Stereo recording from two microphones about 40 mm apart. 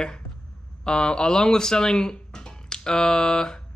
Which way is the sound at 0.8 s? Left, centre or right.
Left.